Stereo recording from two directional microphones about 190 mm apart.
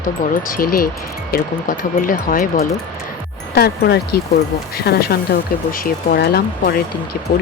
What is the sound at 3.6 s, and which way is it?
Speech, 55° left (ahead or behind).